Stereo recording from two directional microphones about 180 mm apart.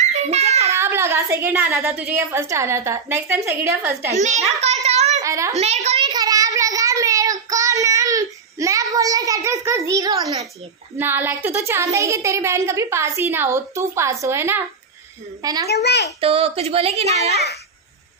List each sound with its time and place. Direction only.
0.0 s child singing: 40° right (ahead or behind)
0.7 s a woman's voice: 15° right (ahead or behind)
4.1 s a child's voice: 40° right (ahead or behind)
4.8 s a sound: 35° right (ahead or behind)
5.2 s a child's voice: 15° right (ahead or behind)
5.6 s a child's voice: 35° right (ahead or behind)
6.0 s child singing: 20° right (ahead or behind)
11.0 s a woman's voice: 10° right (ahead or behind)
15.7 s a child's voice: 70° left (ahead or behind)
16.2 s a child's voice: 30° right (ahead or behind)